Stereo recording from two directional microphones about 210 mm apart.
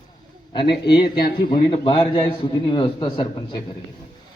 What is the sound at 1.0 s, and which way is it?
Speech, 45° left (ahead or behind).